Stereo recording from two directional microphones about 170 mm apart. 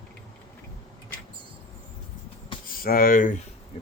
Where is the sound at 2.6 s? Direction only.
55° left (ahead or behind).